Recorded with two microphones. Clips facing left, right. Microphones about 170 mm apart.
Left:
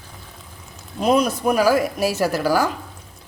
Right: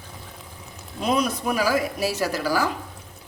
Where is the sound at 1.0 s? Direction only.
45° left (ahead or behind).